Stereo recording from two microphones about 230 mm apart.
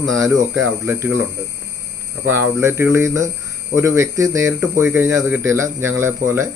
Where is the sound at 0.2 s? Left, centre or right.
Centre.